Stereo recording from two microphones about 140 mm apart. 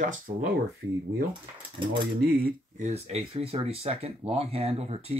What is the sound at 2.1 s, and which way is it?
Speech, 90° right.